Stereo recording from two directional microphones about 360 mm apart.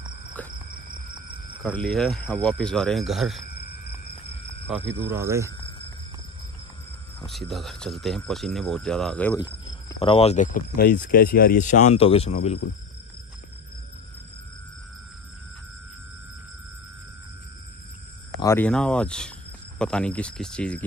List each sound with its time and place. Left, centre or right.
0.5 s cricket: right
1.6 s speech: centre
4.6 s speech: centre
7.2 s speech: centre
18.4 s speech: centre